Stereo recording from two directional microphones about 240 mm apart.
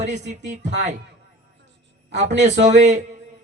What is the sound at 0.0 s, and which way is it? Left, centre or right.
Speech, right.